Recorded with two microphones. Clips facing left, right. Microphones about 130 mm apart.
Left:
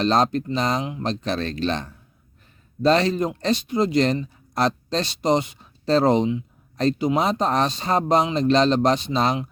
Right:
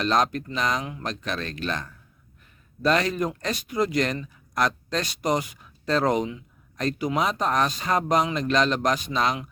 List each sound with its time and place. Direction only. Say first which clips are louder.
0.0 s speech: left 4 dB; 30° left (ahead or behind)